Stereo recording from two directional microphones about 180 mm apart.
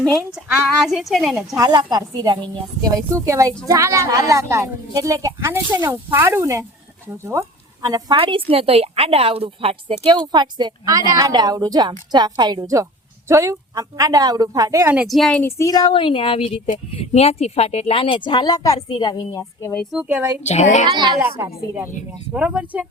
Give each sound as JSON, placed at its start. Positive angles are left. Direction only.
{"t": 0.0, "sound": "a woman's voice", "side_deg": -20}
{"t": 0.9, "sound": "speech", "side_deg": 0}
{"t": 1.5, "sound": "a woman's voice", "side_deg": -20}
{"t": 14.9, "sound": "a woman's voice", "side_deg": 0}
{"t": 19.9, "sound": "speech", "side_deg": -5}
{"t": 20.4, "sound": "speech", "side_deg": 40}
{"t": 21.2, "sound": "speech", "side_deg": -15}